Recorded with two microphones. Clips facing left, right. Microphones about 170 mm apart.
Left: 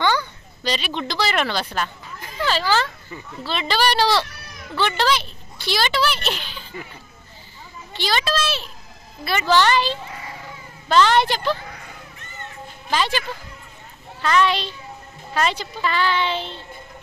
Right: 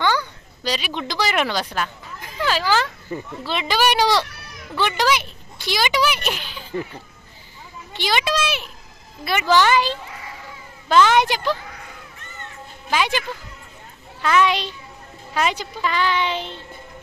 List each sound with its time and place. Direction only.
0.0 s a woman's voice: 10° right (ahead or behind)
7.9 s a child's voice: 15° right (ahead or behind)
12.9 s a woman's voice: 15° right (ahead or behind)
14.2 s a woman's voice: 10° right (ahead or behind)